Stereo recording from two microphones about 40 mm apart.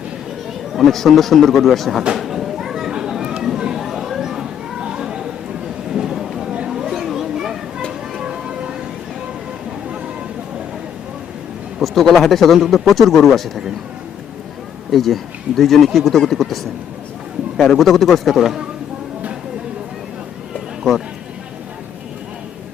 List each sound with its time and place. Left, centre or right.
0.7 s a man's voice: centre
2.1 s a sound: centre
2.9 s children playing: centre
3.4 s a sound: centre
6.9 s children playing: centre
8.2 s vehicle: right
11.8 s a sound: centre
12.1 s a man's voice: centre
14.8 s a man's voice: centre
17.7 s a man's voice: centre
18.3 s a man's voice: centre